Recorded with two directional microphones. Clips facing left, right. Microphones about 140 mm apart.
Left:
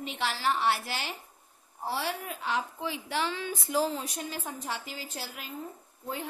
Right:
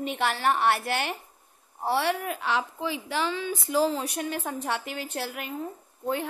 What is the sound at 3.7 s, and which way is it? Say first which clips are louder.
A woman's voice: right 5 dB; 85° right.